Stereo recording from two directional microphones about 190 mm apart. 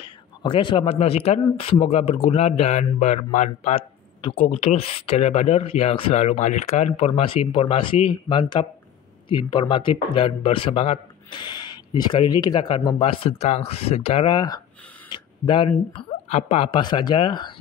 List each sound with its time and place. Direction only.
0.0 s speech: 25° left (ahead or behind)
15.0 s a sound: 25° left (ahead or behind)
16.0 s speech: 35° left (ahead or behind)